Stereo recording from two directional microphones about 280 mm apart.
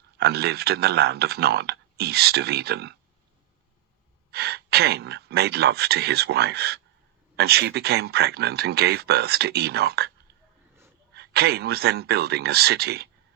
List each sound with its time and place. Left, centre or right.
0.2 s speech: right
4.3 s speech: right
11.1 s speech: right